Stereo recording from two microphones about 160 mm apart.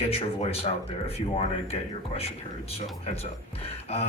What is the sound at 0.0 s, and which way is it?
Speech, 40° left (ahead or behind).